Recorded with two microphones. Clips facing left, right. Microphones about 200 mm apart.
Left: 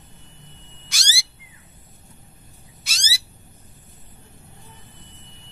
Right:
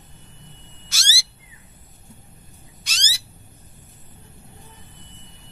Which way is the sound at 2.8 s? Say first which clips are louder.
Left 1 dB; 10° left (ahead or behind).